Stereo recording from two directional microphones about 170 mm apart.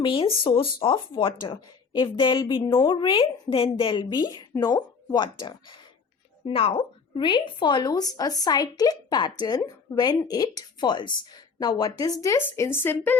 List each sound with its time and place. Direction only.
0.0 s a woman's voice: 30° left (ahead or behind); by 13.1 s 15° left (ahead or behind)